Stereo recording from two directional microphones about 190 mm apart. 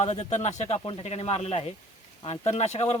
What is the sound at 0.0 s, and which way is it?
Speech, 35° left (ahead or behind).